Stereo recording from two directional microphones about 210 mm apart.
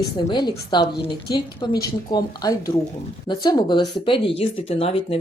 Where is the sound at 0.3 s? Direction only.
20° left (ahead or behind).